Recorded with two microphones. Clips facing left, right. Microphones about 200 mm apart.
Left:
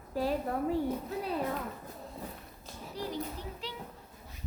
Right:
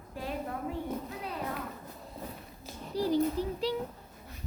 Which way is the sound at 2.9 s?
35° right (ahead or behind).